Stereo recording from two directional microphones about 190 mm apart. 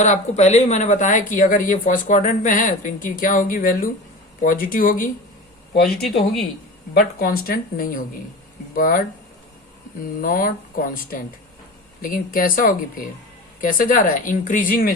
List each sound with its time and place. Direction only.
0.0 s speech: 40° left (ahead or behind)
5.8 s speech: centre (ahead or behind)
6.9 s speech: 50° left (ahead or behind)
10.2 s speech: 50° left (ahead or behind)